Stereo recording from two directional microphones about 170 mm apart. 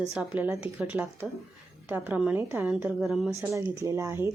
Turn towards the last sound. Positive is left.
turn(degrees=-15)  # may be behind; listen again after turning